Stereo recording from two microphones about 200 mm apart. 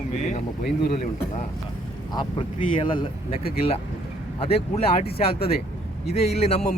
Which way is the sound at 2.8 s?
25° left (ahead or behind).